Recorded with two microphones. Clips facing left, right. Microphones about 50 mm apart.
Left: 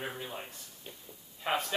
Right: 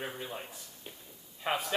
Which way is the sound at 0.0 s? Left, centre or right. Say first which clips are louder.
Even; centre.